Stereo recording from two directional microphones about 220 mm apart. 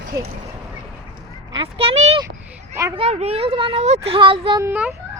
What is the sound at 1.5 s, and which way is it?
Speech, 25° right (ahead or behind).